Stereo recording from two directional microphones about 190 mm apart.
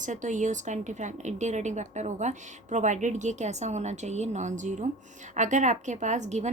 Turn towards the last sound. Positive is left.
turn(degrees=-40)  # may be behind; listen again after turning